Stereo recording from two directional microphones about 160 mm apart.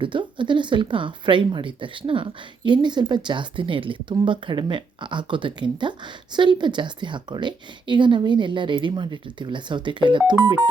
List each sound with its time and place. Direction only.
0.0 s speech: 30° right (ahead or behind)